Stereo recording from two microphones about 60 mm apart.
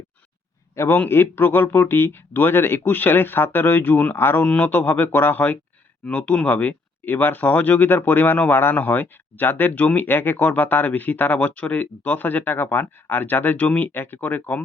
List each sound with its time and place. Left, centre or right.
0.9 s speech: left
4.4 s speech: left
4.7 s speech: left